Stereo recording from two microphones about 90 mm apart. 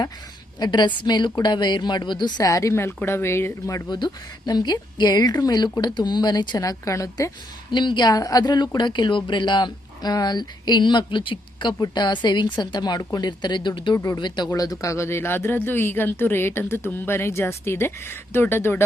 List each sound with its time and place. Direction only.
0.6 s a woman's voice: 55° left (ahead or behind)
2.4 s speech: 40° left (ahead or behind)
3.8 s a woman's voice: 50° left (ahead or behind)
6.6 s a woman's voice: 40° left (ahead or behind)
7.7 s a woman's voice: 60° left (ahead or behind)
11.8 s a woman's voice: 55° left (ahead or behind)
13.9 s a woman's voice: 40° left (ahead or behind)
14.2 s speech: 55° left (ahead or behind); by 18.9 s 25° left (ahead or behind)